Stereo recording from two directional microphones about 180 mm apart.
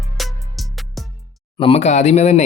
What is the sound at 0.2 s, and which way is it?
Music, centre (ahead or behind).